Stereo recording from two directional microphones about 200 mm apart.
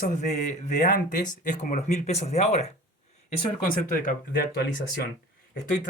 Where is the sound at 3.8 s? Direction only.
40° left (ahead or behind).